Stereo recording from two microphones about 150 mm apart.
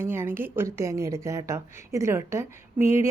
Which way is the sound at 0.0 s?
15° right (ahead or behind).